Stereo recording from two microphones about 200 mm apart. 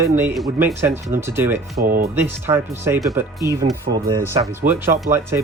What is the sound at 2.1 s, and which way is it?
Speech, 10° right (ahead or behind).